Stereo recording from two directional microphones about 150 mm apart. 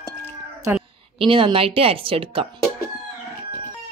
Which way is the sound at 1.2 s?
35° right (ahead or behind).